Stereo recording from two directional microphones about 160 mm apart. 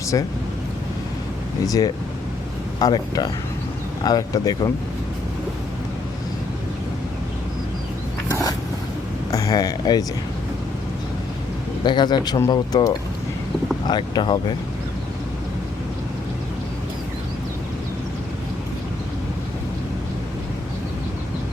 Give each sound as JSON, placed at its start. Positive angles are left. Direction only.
{"t": 0.1, "sound": "speech", "side_deg": 25}
{"t": 1.6, "sound": "speech", "side_deg": 20}
{"t": 9.3, "sound": "speech", "side_deg": 20}
{"t": 11.8, "sound": "speech", "side_deg": 30}